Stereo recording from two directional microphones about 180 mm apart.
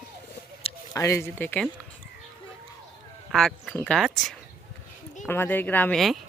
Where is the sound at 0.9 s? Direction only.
15° left (ahead or behind).